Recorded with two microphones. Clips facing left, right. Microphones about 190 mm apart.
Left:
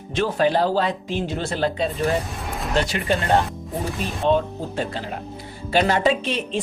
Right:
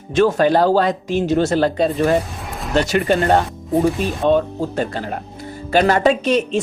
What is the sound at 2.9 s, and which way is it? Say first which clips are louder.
Speech: right 6 dB; 50° right (ahead or behind).